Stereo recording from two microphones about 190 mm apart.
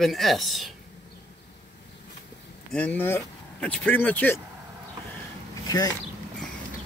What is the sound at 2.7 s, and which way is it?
Speech, 5° left (ahead or behind).